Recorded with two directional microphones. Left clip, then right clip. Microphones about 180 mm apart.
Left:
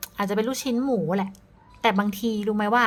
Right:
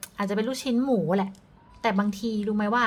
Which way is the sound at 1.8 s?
15° left (ahead or behind).